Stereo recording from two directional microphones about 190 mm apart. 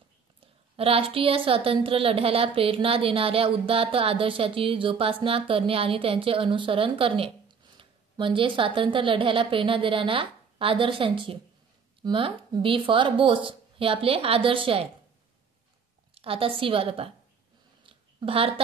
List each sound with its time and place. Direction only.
0.7 s a woman's voice: 30° right (ahead or behind)
16.2 s a woman's voice: 30° right (ahead or behind)
17.8 s a sound: 30° right (ahead or behind)